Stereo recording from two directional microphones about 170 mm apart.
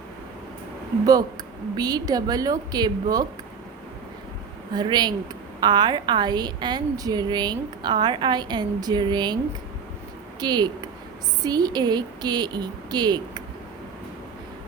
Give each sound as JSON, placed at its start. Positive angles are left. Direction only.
{"t": 1.7, "sound": "a woman's voice", "side_deg": -25}
{"t": 4.7, "sound": "a woman's voice", "side_deg": -25}
{"t": 10.4, "sound": "a woman's voice", "side_deg": -25}